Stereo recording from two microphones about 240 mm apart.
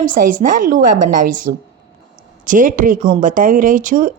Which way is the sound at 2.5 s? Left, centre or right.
Right.